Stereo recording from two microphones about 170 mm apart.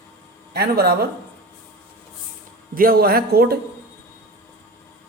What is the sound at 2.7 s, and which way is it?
Speech, 60° right (ahead or behind).